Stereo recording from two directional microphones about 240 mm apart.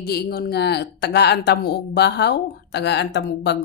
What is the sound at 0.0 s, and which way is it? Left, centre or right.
A woman's voice, left.